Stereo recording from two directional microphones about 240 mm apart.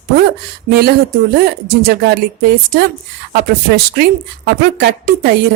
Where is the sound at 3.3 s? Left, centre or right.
Right.